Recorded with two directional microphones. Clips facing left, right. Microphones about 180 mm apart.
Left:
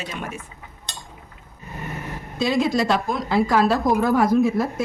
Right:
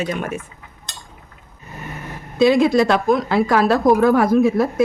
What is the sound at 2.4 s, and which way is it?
Speech, 60° right (ahead or behind).